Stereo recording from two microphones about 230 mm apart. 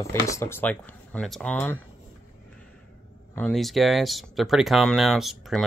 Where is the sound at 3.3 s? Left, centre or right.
Centre.